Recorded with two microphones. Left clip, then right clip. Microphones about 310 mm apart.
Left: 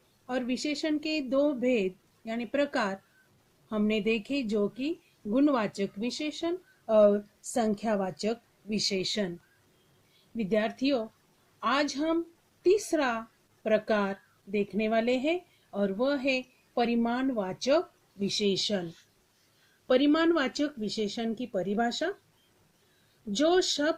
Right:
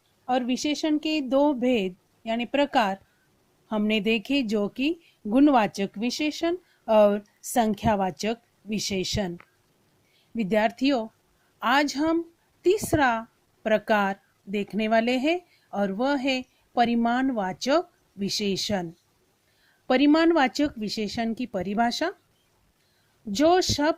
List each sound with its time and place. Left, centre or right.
0.3 s speech: right
8.7 s speech: right
9.0 s speech: right
10.3 s speech: right
19.9 s speech: right
23.3 s speech: right